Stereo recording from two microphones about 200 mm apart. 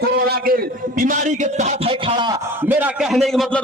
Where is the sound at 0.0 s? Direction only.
50° right (ahead or behind); by 2.4 s 25° right (ahead or behind).